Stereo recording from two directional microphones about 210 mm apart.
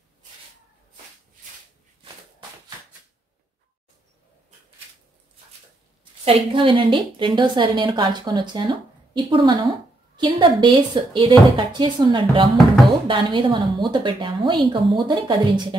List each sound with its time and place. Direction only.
6.2 s a woman's voice: 25° right (ahead or behind)